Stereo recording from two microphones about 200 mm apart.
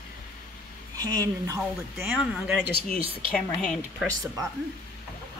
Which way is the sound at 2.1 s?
5° right (ahead or behind).